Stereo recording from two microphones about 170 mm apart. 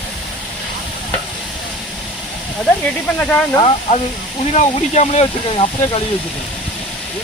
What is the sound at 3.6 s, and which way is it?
Speech, 35° left (ahead or behind).